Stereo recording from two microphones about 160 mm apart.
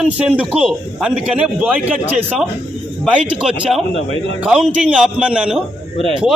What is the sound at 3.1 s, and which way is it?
A man's voice, 5° right (ahead or behind).